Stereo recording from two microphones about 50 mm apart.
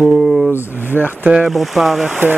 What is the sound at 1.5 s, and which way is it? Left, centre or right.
Speech, centre.